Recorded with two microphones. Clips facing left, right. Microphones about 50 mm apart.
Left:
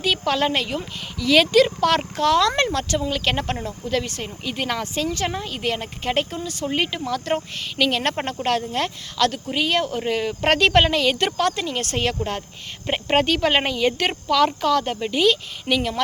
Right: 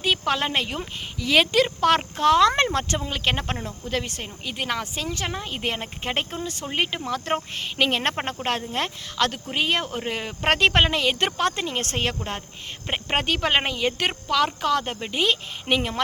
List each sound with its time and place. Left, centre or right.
0.0 s speech: centre
5.5 s speech: centre
11.9 s speech: centre